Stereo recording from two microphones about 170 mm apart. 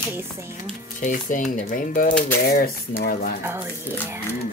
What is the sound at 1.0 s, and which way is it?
Speech, 50° left (ahead or behind).